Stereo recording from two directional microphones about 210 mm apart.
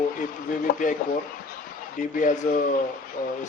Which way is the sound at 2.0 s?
35° left (ahead or behind).